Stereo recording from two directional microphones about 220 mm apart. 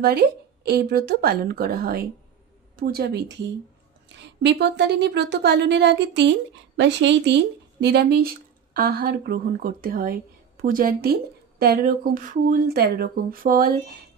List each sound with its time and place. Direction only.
0.0 s speech: 45° right (ahead or behind)